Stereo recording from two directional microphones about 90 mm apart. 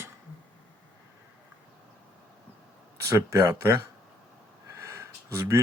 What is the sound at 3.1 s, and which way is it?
Speech, 35° right (ahead or behind).